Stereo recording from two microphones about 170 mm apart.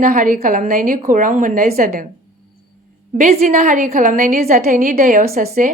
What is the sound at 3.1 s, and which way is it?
A woman's voice, 45° right (ahead or behind).